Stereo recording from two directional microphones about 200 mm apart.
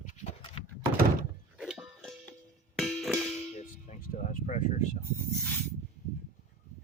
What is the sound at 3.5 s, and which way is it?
Music, 35° left (ahead or behind).